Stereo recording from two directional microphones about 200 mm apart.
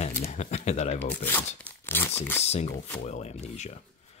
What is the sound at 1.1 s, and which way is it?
Speech, 10° left (ahead or behind).